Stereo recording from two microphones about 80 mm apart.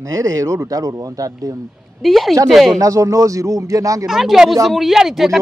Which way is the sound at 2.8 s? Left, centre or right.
Right.